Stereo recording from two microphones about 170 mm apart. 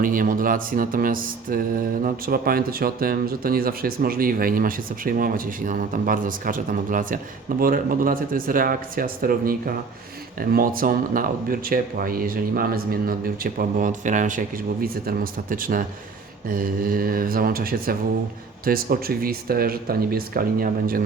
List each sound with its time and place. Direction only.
0.0 s speech: 55° right (ahead or behind)